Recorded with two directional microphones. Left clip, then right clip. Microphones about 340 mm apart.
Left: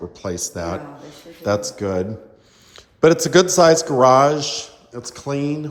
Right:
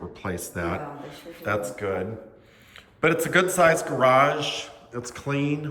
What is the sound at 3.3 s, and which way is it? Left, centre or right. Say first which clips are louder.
Speech: left 4 dB; centre.